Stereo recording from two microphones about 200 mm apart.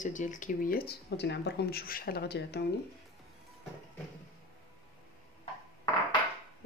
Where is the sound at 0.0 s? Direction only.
40° left (ahead or behind); by 2.6 s 55° left (ahead or behind).